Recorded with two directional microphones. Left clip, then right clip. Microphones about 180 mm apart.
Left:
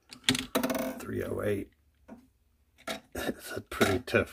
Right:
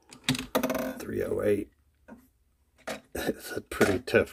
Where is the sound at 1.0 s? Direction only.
30° right (ahead or behind).